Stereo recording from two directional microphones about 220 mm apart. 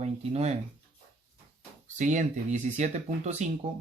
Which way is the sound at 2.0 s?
35° right (ahead or behind).